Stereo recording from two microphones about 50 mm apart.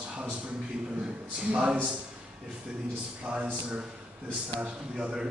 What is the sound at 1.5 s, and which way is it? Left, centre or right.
Speech, right.